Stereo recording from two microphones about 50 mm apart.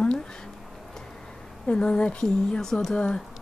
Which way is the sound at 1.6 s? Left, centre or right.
Centre.